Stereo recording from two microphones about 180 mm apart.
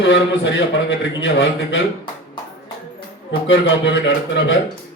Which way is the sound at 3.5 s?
90° left.